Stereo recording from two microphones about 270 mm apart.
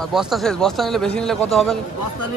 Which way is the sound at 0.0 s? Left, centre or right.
Centre.